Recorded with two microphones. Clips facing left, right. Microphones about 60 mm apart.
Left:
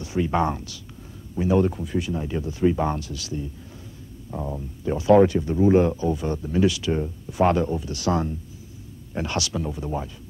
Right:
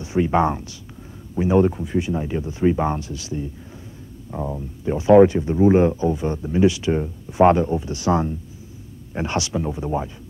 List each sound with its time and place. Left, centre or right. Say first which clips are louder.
0.0 s speech: right 4 dB; right